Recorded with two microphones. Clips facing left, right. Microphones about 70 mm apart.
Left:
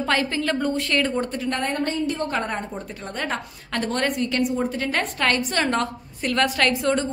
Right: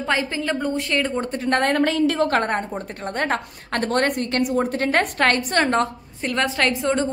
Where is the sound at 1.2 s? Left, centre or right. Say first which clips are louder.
Right 1 dB; right.